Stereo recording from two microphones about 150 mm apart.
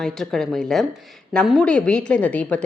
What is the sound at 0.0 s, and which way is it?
A woman's voice, 5° left (ahead or behind).